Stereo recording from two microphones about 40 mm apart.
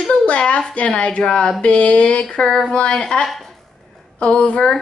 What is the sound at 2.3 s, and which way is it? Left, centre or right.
Speech, centre.